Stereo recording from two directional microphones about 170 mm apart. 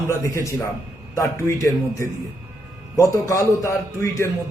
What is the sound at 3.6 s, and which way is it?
Speech, 15° left (ahead or behind).